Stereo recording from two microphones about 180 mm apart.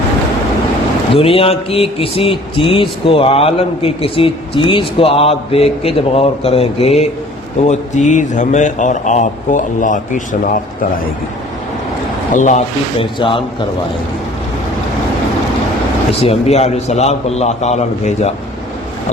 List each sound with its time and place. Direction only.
1.1 s a man's voice: 30° left (ahead or behind); by 10.6 s 45° left (ahead or behind)
12.3 s a man's voice: 40° left (ahead or behind)
13.1 s a man's voice: 30° left (ahead or behind)
16.2 s a man's voice: 35° left (ahead or behind)